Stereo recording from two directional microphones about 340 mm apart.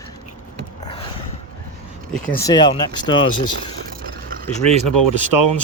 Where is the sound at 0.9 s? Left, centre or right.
Centre.